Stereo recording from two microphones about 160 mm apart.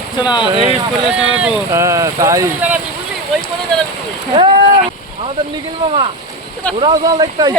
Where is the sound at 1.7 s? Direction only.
20° right (ahead or behind).